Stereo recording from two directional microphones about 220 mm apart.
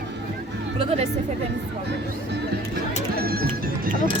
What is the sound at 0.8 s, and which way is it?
Speech, 30° right (ahead or behind).